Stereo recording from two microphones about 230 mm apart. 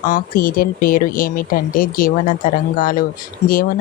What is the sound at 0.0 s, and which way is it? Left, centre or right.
Speech, left.